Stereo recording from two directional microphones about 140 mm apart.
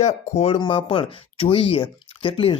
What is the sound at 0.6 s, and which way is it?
Speech, 35° left (ahead or behind).